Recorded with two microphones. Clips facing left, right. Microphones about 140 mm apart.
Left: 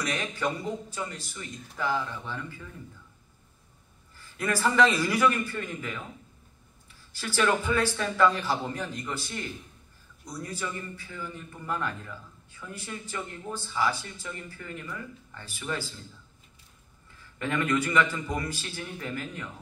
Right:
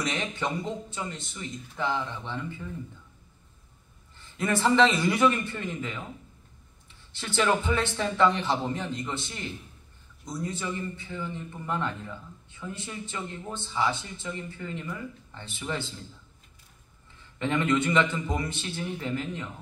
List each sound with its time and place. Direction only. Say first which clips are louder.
0.0 s a man's voice: even; 25° right (ahead or behind)
4.2 s a man's voice: right 2 dB; 25° right (ahead or behind)
17.4 s a man's voice: right 2 dB; 25° right (ahead or behind)